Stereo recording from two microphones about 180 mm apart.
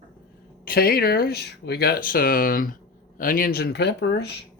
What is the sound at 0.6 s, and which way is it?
Speech, 55° left (ahead or behind).